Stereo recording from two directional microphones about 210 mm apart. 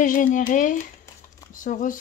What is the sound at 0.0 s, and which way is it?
Speech, 40° left (ahead or behind).